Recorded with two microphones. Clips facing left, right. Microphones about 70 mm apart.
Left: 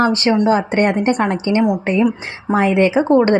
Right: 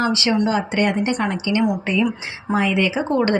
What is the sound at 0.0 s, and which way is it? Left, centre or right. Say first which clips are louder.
A woman's voice: left 5 dB; left.